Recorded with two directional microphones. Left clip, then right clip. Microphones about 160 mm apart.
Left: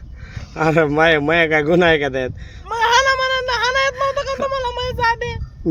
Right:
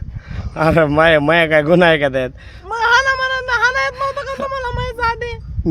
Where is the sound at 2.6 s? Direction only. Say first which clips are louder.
Right 1 dB; 15° right (ahead or behind).